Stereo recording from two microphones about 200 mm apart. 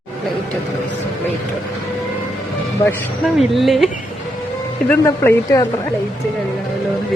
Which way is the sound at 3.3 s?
Centre (ahead or behind).